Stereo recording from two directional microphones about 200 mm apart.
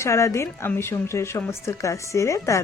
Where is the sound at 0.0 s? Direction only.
15° left (ahead or behind).